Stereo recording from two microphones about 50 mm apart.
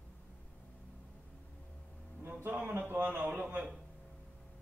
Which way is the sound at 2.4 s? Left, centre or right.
Right.